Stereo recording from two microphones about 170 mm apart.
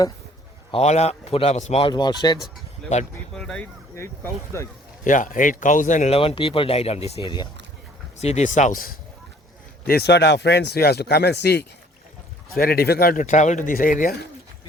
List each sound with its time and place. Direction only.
0.7 s speech: 40° left (ahead or behind)
2.8 s speech: 5° left (ahead or behind)
3.9 s speech: 15° left (ahead or behind)
5.0 s speech: 50° left (ahead or behind); by 7.4 s 30° left (ahead or behind)
8.2 s speech: 40° left (ahead or behind)
9.8 s speech: 70° left (ahead or behind)
12.5 s speech: 65° left (ahead or behind)